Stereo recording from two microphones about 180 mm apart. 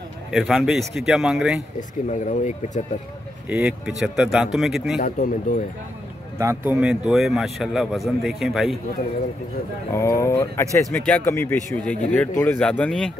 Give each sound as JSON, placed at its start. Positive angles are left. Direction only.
{"t": 0.3, "sound": "speech", "side_deg": 0}
{"t": 1.8, "sound": "speech", "side_deg": 45}
{"t": 3.4, "sound": "speech", "side_deg": -5}
{"t": 5.0, "sound": "speech", "side_deg": 45}
{"t": 6.3, "sound": "speech", "side_deg": -15}
{"t": 9.9, "sound": "speech", "side_deg": 15}